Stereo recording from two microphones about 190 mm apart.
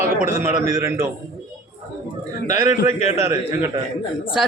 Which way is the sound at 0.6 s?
15° right (ahead or behind).